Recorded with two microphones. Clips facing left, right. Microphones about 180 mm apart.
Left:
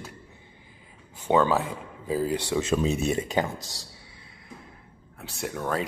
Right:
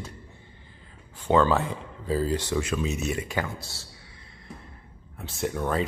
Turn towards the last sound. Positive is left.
turn(degrees=0)  # may be behind; listen again after turning